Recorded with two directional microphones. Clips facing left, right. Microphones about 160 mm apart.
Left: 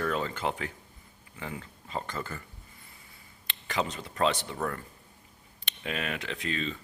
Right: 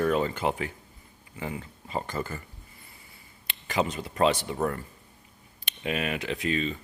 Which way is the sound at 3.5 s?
10° right (ahead or behind).